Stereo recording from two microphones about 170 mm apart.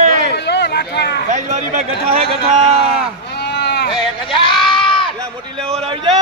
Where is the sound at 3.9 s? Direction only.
30° left (ahead or behind).